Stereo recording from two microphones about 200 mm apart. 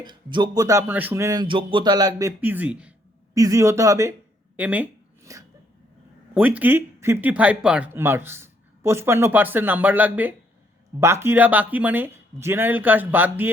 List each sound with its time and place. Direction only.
0.0 s speech: 20° right (ahead or behind)
4.5 s a sound: 10° right (ahead or behind)
6.3 s speech: 5° right (ahead or behind)